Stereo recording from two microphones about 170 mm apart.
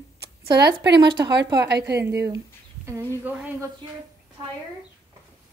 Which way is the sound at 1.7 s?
75° right (ahead or behind).